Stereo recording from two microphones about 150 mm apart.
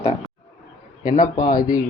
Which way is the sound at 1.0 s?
65° left (ahead or behind).